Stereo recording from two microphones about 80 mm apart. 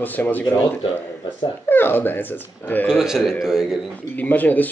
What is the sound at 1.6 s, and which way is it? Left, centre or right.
Speech, left.